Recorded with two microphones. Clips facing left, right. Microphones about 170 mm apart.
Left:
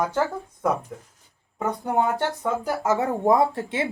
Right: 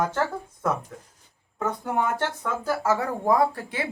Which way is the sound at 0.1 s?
10° left (ahead or behind).